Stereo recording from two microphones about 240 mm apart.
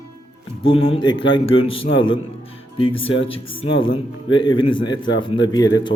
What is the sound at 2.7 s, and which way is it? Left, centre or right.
Speech, left.